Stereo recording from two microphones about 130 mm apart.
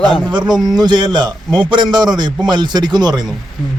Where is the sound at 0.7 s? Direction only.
35° right (ahead or behind).